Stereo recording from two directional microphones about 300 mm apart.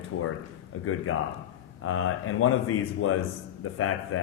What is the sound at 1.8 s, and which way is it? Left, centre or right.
A man's voice, left.